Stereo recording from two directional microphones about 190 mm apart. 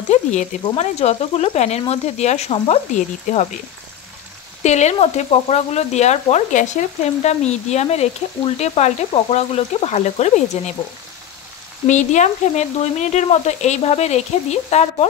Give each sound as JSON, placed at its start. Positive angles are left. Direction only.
{"t": 0.1, "sound": "frying", "side_deg": 40}
{"t": 4.6, "sound": "frying", "side_deg": 35}
{"t": 11.8, "sound": "frying", "side_deg": 40}